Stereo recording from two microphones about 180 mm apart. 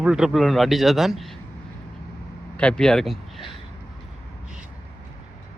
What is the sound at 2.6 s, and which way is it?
Speech, 5° left (ahead or behind).